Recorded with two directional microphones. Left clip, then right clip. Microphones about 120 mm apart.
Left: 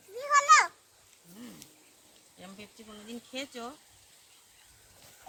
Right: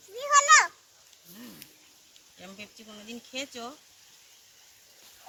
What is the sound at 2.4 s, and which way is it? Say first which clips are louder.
Speech: right 3 dB; centre (ahead or behind).